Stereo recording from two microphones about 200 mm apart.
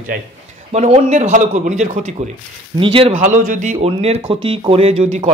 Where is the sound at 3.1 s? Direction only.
40° right (ahead or behind).